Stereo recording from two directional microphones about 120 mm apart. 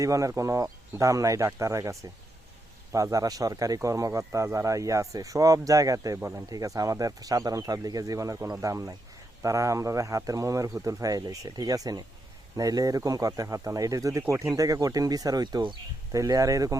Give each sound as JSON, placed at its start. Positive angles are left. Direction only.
{"t": 0.0, "sound": "speech", "side_deg": -25}
{"t": 6.1, "sound": "speech", "side_deg": -15}
{"t": 6.5, "sound": "speech", "side_deg": -30}